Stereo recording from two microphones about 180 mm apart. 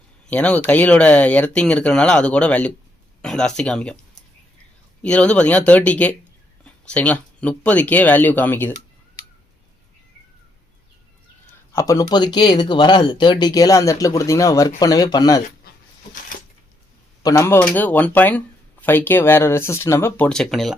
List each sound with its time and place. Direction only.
0.3 s speech: 5° left (ahead or behind)
5.0 s speech: 5° left (ahead or behind)
11.7 s speech: 15° left (ahead or behind)
17.2 s speech: 15° left (ahead or behind); by 20.7 s centre (ahead or behind)